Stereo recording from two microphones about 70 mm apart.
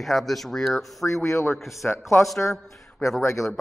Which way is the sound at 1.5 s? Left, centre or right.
Left.